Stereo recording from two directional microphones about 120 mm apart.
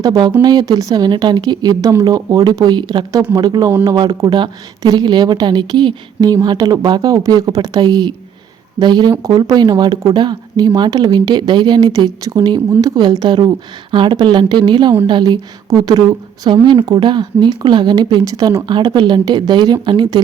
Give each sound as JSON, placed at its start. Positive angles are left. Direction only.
{"t": 0.0, "sound": "a woman's voice", "side_deg": -30}